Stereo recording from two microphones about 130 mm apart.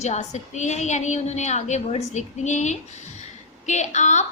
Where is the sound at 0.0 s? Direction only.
60° left (ahead or behind).